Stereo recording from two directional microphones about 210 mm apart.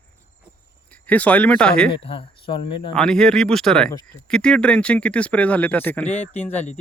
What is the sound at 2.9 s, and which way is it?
Speech, 5° left (ahead or behind).